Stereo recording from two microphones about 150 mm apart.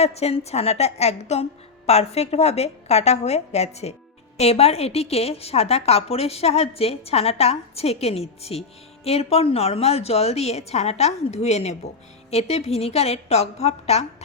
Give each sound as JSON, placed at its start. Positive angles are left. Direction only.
{"t": 0.0, "sound": "a woman's voice", "side_deg": 45}